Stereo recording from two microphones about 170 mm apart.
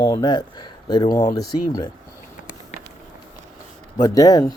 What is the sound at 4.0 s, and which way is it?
Speech, 20° left (ahead or behind).